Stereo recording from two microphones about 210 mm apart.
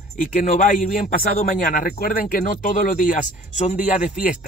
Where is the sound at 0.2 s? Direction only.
40° left (ahead or behind).